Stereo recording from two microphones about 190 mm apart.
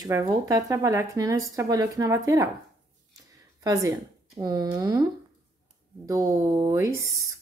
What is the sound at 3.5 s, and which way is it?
Speech, 20° right (ahead or behind).